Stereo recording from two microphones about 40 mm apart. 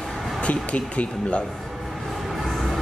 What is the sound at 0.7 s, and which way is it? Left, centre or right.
Speech, left.